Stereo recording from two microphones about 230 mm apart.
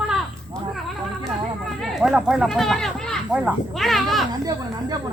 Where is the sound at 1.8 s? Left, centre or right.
Centre.